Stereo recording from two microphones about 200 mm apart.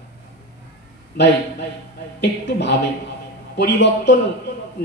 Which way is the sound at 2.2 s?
60° left (ahead or behind).